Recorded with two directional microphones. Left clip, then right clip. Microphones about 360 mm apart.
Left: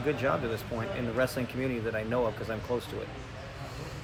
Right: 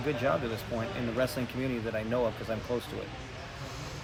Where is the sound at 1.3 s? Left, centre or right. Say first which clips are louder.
Left 1 dB; centre.